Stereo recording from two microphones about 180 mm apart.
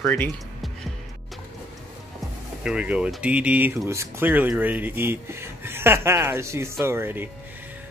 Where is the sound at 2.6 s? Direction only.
5° right (ahead or behind).